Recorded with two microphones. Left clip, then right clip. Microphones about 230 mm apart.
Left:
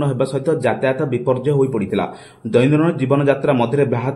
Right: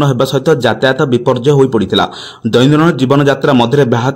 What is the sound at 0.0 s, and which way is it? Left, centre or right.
A man's voice, right.